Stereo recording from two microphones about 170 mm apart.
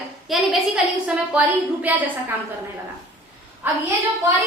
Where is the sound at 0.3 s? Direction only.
Centre (ahead or behind).